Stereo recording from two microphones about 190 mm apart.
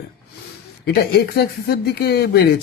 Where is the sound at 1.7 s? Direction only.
55° left (ahead or behind).